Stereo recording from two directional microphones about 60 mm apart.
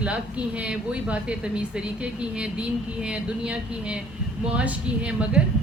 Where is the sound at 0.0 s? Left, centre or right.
Centre.